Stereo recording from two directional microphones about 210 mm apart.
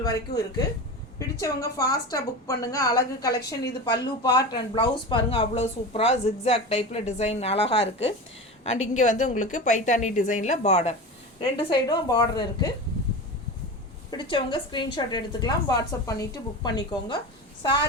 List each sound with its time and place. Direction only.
0.0 s a woman's voice: 15° left (ahead or behind)
3.2 s a woman's voice: 50° left (ahead or behind)
3.9 s a woman's voice: 20° left (ahead or behind)
14.1 s a woman's voice: 20° left (ahead or behind)